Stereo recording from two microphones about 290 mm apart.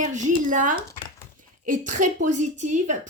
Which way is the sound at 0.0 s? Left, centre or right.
Right.